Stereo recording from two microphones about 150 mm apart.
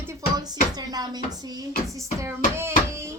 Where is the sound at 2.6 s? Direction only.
15° right (ahead or behind).